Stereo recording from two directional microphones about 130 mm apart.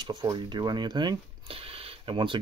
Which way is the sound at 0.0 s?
35° right (ahead or behind).